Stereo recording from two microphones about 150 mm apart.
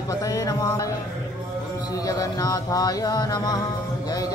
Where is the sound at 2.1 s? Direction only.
25° left (ahead or behind).